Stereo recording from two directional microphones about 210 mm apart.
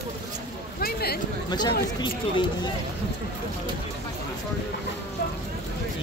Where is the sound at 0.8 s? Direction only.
45° left (ahead or behind).